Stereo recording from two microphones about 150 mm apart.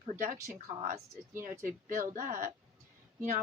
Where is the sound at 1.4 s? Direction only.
65° right (ahead or behind).